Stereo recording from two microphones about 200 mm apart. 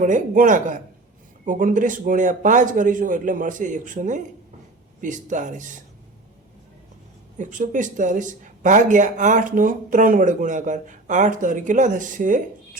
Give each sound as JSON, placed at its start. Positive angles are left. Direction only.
{"t": 0.0, "sound": "speech", "side_deg": -40}
{"t": 7.3, "sound": "speech", "side_deg": -40}